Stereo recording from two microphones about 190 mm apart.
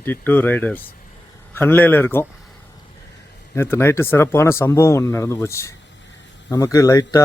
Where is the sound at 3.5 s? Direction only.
10° left (ahead or behind).